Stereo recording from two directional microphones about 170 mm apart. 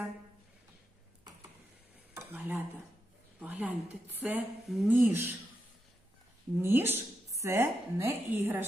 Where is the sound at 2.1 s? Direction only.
10° right (ahead or behind).